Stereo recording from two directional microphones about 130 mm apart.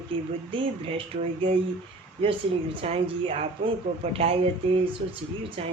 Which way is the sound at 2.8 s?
55° right (ahead or behind).